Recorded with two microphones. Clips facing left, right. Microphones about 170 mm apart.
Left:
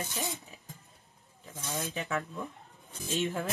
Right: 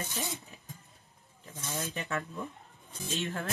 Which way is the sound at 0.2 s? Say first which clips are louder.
Left 1 dB; centre (ahead or behind).